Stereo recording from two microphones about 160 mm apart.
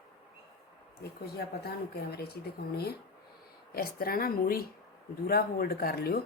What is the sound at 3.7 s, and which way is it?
Speech, 70° left (ahead or behind).